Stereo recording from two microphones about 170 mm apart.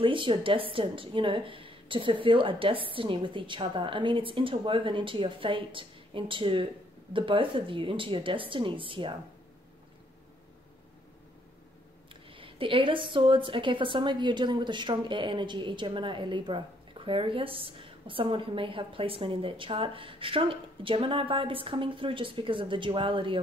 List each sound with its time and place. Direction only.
0.0 s a woman's voice: 30° right (ahead or behind)
12.3 s a woman's voice: 30° right (ahead or behind)